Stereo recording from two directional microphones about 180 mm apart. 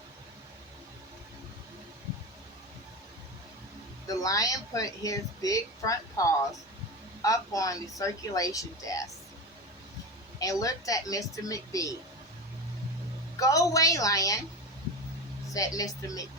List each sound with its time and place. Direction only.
4.1 s a woman's voice: 20° left (ahead or behind)
10.3 s a woman's voice: 20° left (ahead or behind)
13.4 s a woman's voice: 20° left (ahead or behind)
15.5 s a woman's voice: 20° left (ahead or behind)